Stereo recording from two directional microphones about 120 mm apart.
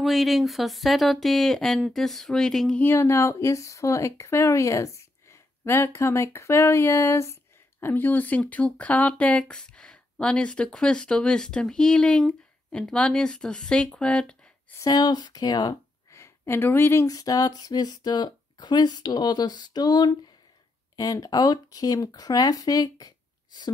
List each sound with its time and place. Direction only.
0.0 s speech: centre (ahead or behind)
2.8 s speech: 20° left (ahead or behind)
14.8 s speech: 30° left (ahead or behind)